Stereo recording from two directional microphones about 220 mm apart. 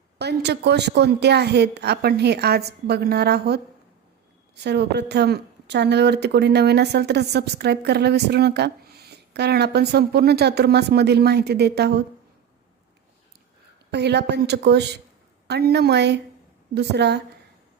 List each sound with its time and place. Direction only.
0.2 s a woman's voice: 50° right (ahead or behind)
4.6 s a woman's voice: 50° right (ahead or behind)
13.9 s a woman's voice: 50° right (ahead or behind)